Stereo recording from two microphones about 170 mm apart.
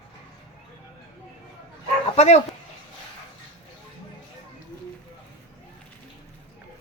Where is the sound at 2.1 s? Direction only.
40° left (ahead or behind).